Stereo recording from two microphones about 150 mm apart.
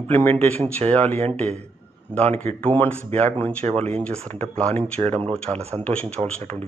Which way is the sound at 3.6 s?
45° right (ahead or behind).